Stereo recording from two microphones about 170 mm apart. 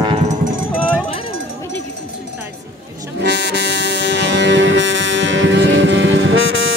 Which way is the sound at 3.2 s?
90° right.